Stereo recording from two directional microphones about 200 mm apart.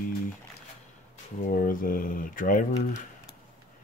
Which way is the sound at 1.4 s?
45° left (ahead or behind).